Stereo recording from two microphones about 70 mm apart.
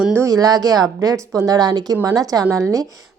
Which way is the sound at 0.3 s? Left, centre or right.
Right.